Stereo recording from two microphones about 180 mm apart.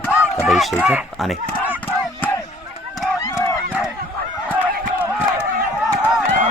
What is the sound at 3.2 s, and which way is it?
Crowd, 15° left (ahead or behind).